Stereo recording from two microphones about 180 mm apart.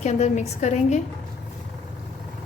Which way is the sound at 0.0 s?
40° left (ahead or behind).